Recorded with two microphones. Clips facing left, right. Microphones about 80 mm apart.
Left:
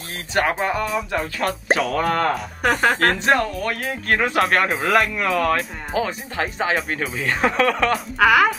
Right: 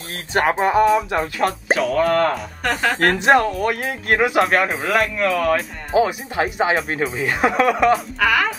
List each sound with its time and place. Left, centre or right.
0.3 s speech: right
1.4 s speech: centre
3.0 s speech: centre
4.4 s speech: centre
5.9 s speech: centre
8.2 s speech: centre